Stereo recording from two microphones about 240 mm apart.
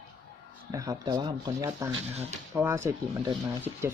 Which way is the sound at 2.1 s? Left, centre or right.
Right.